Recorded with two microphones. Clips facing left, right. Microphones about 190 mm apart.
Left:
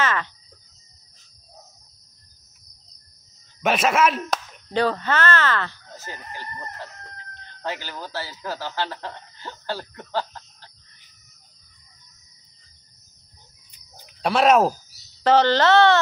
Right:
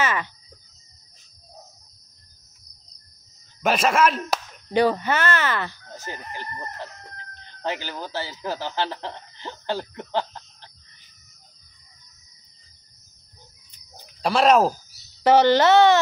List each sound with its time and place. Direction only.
0.0 s a sound: 10° right (ahead or behind)
3.6 s a man's voice: centre (ahead or behind)
4.7 s crowing: 15° right (ahead or behind)
7.6 s speech: 20° right (ahead or behind)
14.2 s a man's voice: centre (ahead or behind)
15.2 s crowing: 10° right (ahead or behind)